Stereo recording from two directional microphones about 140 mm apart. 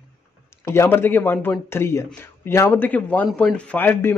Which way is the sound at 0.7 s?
15° left (ahead or behind).